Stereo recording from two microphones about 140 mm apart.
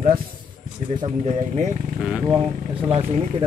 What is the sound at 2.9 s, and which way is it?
Speech, 45° right (ahead or behind).